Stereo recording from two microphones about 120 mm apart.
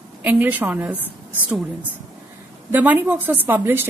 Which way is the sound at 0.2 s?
15° right (ahead or behind).